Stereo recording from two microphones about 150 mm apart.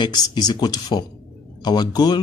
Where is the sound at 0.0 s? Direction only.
30° left (ahead or behind).